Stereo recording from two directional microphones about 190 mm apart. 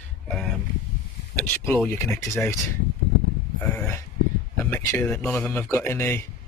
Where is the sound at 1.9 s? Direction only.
15° left (ahead or behind).